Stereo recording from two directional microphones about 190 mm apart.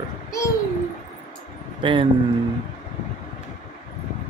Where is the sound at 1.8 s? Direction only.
25° right (ahead or behind).